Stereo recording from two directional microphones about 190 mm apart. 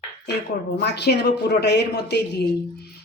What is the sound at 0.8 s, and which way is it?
A woman's voice, 60° left (ahead or behind).